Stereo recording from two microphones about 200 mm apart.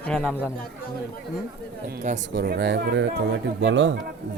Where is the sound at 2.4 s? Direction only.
55° right (ahead or behind).